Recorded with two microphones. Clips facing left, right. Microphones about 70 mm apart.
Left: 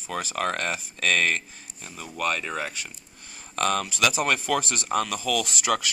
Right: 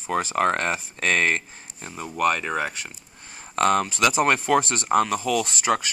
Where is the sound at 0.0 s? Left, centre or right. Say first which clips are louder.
Right 6 dB; right.